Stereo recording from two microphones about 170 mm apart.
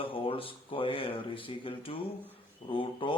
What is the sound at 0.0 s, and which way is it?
Speech, 30° left (ahead or behind).